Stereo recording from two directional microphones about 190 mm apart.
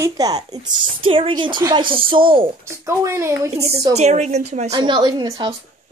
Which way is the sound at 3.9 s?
35° right (ahead or behind).